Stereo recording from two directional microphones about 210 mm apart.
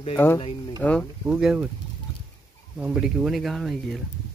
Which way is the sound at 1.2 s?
5° right (ahead or behind).